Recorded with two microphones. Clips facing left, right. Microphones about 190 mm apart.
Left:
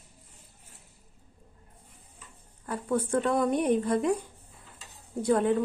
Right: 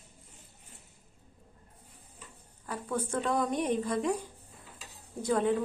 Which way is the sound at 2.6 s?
60° left (ahead or behind).